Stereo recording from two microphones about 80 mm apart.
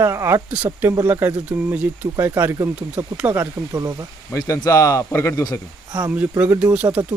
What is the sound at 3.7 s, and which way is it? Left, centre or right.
Speech, right.